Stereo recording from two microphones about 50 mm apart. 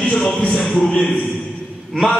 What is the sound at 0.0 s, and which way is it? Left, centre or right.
Speech, centre.